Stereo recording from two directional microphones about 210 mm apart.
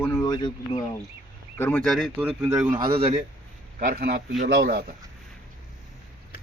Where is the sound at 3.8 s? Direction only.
45° right (ahead or behind).